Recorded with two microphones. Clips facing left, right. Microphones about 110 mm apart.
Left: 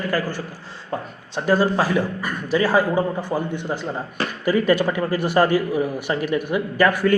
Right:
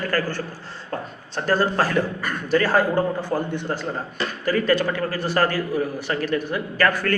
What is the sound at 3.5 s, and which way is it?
A man's voice, 15° left (ahead or behind).